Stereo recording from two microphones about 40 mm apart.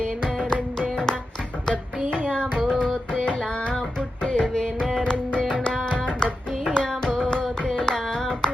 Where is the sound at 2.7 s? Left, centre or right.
Left.